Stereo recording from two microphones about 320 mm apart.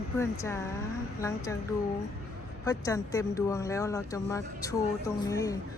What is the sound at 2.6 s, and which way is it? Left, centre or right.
Speech, centre.